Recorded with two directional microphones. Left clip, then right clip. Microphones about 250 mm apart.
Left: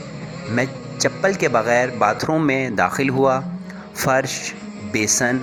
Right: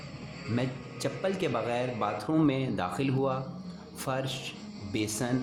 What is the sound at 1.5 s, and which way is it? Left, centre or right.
Speech, left.